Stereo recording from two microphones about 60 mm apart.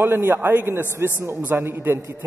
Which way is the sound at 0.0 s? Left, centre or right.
Right.